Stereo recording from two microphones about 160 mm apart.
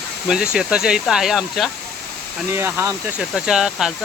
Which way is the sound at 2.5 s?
15° right (ahead or behind).